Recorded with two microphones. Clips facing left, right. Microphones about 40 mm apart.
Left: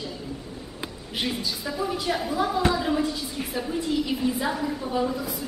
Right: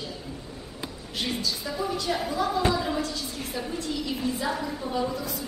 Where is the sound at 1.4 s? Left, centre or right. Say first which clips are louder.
Left 1 dB; centre.